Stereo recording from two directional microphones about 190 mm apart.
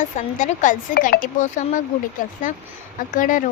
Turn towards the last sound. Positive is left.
turn(degrees=45)  # may be behind; listen again after turning